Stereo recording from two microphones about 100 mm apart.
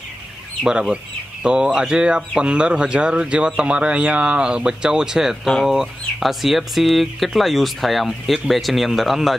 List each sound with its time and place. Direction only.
0.7 s speech: 5° right (ahead or behind)